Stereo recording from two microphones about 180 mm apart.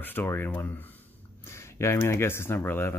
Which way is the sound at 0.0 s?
10° left (ahead or behind).